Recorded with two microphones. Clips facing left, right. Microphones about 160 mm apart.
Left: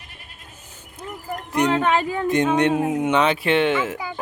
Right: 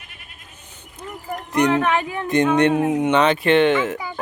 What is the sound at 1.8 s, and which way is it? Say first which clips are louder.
Speech: left 1 dB; 30° left (ahead or behind).